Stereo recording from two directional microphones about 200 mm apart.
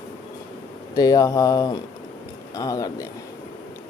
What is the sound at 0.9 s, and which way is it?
Speech, 20° left (ahead or behind).